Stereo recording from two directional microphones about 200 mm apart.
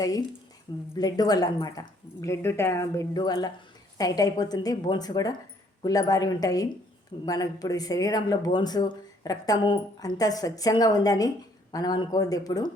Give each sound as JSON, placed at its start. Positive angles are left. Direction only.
{"t": 0.0, "sound": "speech", "side_deg": 20}